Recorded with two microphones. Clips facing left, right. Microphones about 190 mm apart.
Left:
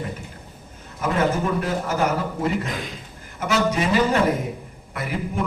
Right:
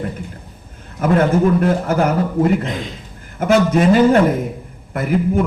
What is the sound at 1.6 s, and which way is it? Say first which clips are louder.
Speech: right 7 dB; 55° right (ahead or behind).